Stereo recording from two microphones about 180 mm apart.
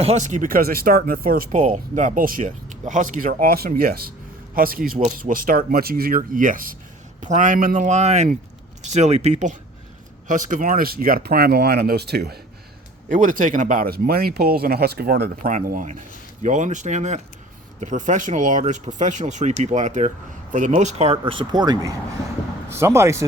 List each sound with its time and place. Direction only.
0.0 s speech: 40° right (ahead or behind); by 12.4 s 60° right (ahead or behind)
13.1 s speech: 50° right (ahead or behind); by 23.2 s 15° right (ahead or behind)